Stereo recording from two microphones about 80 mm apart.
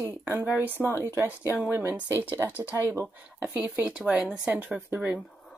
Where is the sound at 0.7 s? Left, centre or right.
Left.